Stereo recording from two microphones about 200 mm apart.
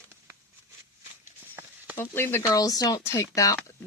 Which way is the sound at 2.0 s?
10° left (ahead or behind).